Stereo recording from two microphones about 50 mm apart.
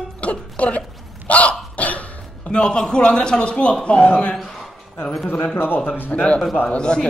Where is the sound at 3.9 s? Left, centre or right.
Left.